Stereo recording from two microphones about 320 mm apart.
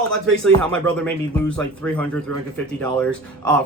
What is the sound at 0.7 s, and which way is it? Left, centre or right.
Speech, centre.